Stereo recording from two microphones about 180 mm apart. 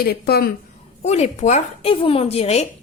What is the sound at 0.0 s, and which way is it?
Speech, 60° left (ahead or behind).